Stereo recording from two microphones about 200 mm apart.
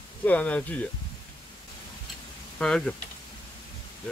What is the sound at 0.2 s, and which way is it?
Speech, 5° left (ahead or behind).